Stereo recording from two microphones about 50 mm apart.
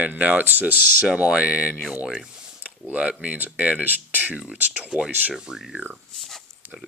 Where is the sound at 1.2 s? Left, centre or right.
Right.